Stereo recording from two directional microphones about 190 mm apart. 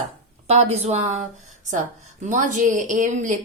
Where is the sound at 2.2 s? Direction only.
40° right (ahead or behind).